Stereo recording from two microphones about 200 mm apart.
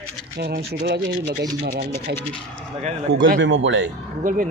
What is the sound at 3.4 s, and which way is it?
Speech, 70° right (ahead or behind).